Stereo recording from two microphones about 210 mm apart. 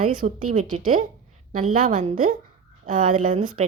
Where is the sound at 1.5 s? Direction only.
40° right (ahead or behind).